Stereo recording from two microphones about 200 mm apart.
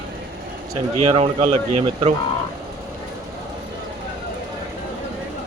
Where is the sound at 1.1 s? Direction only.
30° right (ahead or behind).